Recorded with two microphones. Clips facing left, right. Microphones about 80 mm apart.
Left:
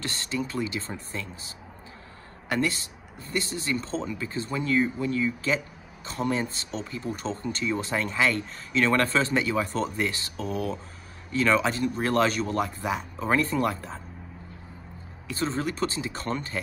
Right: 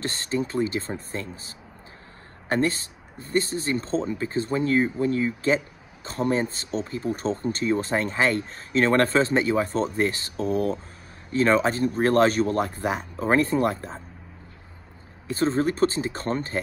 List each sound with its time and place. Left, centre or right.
0.0 s speech: right
2.5 s speech: right
15.2 s speech: right